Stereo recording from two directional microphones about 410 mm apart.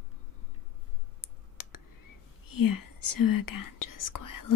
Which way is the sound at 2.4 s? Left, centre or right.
Left.